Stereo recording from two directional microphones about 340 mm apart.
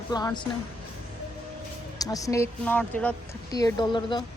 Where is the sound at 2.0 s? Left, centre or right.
Centre.